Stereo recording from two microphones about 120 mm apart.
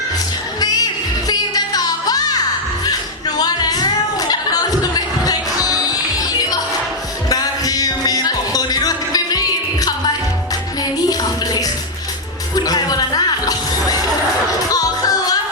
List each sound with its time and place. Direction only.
1.3 s music: 30° left (ahead or behind)
2.8 s a sound: 35° left (ahead or behind)
7.3 s music: 30° left (ahead or behind)
11.1 s music: 30° left (ahead or behind)